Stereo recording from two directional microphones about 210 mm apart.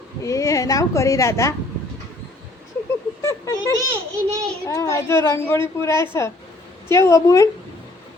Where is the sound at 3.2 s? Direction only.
15° left (ahead or behind).